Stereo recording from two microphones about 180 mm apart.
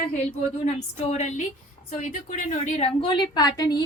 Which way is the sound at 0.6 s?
40° left (ahead or behind).